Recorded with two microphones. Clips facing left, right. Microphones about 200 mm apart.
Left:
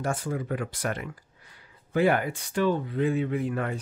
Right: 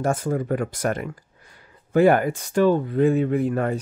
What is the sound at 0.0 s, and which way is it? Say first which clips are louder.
Speech: right 7 dB; 45° right (ahead or behind).